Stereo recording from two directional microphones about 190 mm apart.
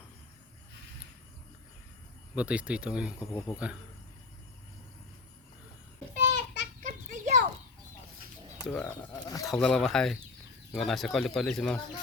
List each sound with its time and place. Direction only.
2.3 s speech: 5° right (ahead or behind)
3.2 s speech: 20° left (ahead or behind)
3.5 s speech: 5° right (ahead or behind)
6.1 s a sound: 35° right (ahead or behind)
6.8 s children playing: 40° right (ahead or behind)
8.6 s speech: 10° left (ahead or behind)
9.5 s speech: 5° left (ahead or behind)